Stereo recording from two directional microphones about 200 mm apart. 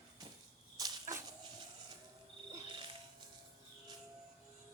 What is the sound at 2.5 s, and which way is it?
Music, 25° right (ahead or behind).